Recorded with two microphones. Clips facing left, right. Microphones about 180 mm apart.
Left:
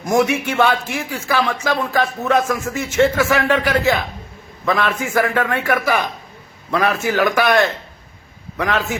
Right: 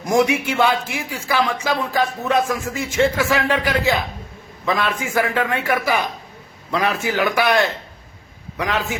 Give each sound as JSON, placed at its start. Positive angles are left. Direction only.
{"t": 0.0, "sound": "speech", "side_deg": -10}